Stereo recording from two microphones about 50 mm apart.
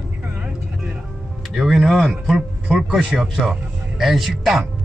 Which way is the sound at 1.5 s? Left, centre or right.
Centre.